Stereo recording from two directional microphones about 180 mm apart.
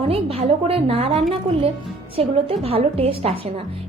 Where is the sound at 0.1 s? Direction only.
30° right (ahead or behind).